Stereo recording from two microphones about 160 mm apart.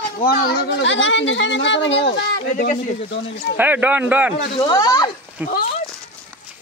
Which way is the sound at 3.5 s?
10° right (ahead or behind).